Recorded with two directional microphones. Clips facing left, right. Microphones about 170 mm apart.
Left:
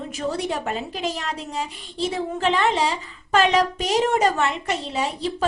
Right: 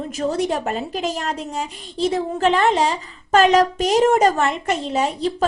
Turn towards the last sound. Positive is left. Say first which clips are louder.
# right 4 dB
turn(degrees=-45)  # may be behind; listen again after turning